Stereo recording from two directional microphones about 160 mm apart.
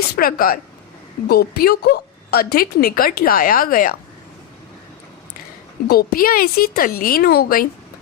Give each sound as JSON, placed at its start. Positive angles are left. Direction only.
{"t": 0.2, "sound": "a woman's voice", "side_deg": 65}
{"t": 5.9, "sound": "a woman's voice", "side_deg": 65}